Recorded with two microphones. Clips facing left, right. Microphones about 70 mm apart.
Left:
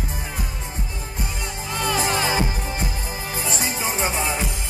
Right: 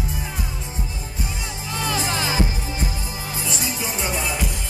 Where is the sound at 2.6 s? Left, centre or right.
Left.